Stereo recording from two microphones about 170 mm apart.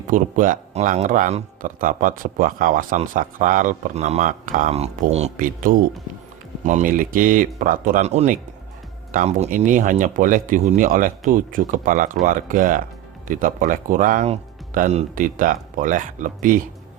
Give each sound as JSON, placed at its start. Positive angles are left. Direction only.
{"t": 0.1, "sound": "a man's voice", "side_deg": -50}